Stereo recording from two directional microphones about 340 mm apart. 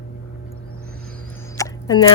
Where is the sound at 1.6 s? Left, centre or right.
Centre.